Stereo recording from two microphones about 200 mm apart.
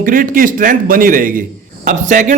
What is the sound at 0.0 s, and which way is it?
A man's voice, 45° right (ahead or behind).